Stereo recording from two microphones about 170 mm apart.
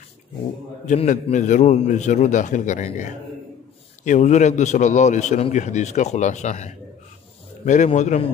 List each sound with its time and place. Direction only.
0.8 s a man's voice: 45° left (ahead or behind)